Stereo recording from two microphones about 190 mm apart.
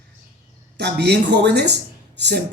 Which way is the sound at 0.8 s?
60° right (ahead or behind).